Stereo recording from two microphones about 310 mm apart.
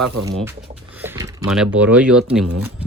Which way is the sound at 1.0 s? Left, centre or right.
Centre.